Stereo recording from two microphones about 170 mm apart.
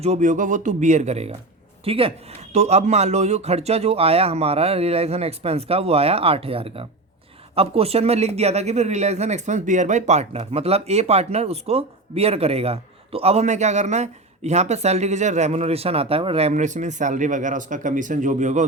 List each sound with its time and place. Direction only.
0.0 s speech: 40° right (ahead or behind)